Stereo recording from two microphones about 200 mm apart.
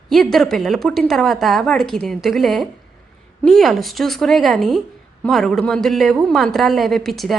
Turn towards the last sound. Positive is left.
turn(degrees=0)  # may be behind; listen again after turning